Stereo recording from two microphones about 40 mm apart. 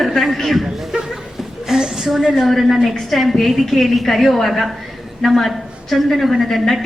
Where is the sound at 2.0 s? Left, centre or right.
Centre.